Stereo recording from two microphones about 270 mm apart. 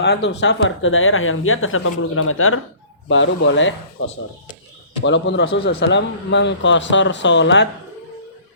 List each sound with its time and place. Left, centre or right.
0.0 s speech: left
5.0 s speech: left